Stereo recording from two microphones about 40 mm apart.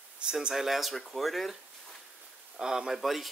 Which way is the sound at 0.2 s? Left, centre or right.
Right.